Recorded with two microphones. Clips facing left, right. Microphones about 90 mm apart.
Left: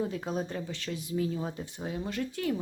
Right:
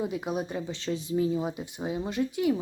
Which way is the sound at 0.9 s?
25° right (ahead or behind).